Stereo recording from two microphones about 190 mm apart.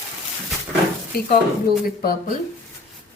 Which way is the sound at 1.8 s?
50° left (ahead or behind).